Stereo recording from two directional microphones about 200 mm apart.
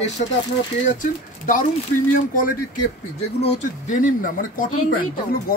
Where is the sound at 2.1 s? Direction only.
40° left (ahead or behind).